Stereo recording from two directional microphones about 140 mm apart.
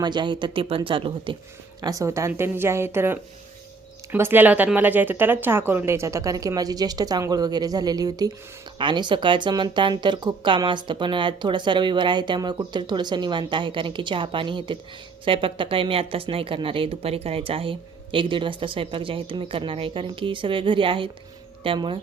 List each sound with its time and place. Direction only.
0.0 s speech: 35° right (ahead or behind)
1.8 s speech: 25° right (ahead or behind)